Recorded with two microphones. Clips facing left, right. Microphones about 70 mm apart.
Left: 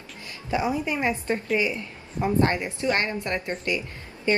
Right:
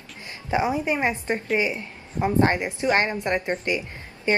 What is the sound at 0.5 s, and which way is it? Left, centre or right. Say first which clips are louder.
A woman's voice: right 2 dB; right.